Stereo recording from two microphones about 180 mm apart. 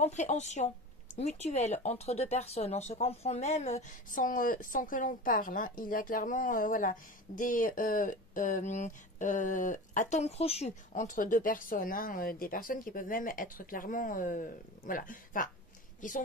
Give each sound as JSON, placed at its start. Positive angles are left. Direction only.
{"t": 0.0, "sound": "a woman's voice", "side_deg": 40}